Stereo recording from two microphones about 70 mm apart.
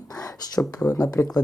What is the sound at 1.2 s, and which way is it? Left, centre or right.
Speech, left.